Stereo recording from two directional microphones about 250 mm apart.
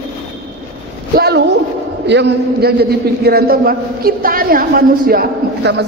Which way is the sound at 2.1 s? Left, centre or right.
Right.